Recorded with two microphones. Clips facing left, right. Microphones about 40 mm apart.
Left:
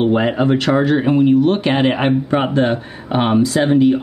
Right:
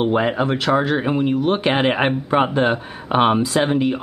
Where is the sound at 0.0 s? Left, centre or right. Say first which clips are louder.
Left 3 dB; centre.